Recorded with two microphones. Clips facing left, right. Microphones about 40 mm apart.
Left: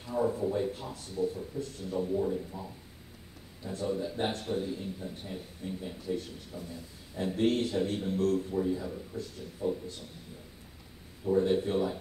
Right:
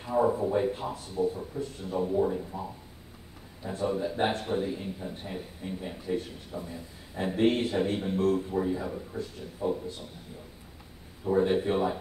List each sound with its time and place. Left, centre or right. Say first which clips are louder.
0.1 s a sound: right 5 dB; right
0.5 s speech: right 4 dB; right
2.0 s speech: right 5 dB; right
2.5 s speech: right 5 dB; centre
3.6 s speech: right 3 dB; right
8.6 s speech: right 2 dB; right
9.6 s speech: right 2 dB; centre
11.4 s speech: right 2 dB; right